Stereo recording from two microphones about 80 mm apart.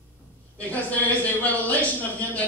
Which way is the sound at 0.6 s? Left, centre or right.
Centre.